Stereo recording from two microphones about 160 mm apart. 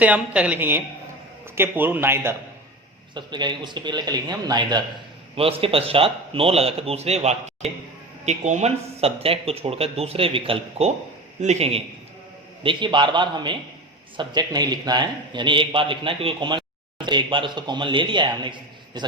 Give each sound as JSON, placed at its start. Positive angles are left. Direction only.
{"t": 0.0, "sound": "speech", "side_deg": -10}
{"t": 3.2, "sound": "a man's voice", "side_deg": -30}
{"t": 5.4, "sound": "a man's voice", "side_deg": -35}
{"t": 12.6, "sound": "a man's voice", "side_deg": -30}